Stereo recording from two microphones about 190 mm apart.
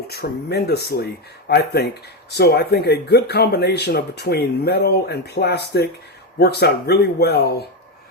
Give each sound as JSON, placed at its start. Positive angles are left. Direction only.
{"t": 0.1, "sound": "speech", "side_deg": 60}